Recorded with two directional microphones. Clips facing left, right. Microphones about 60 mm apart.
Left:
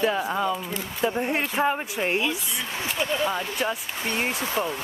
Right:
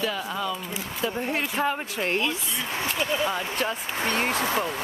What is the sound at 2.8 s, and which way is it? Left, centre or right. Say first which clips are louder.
Speech: left 1 dB; centre.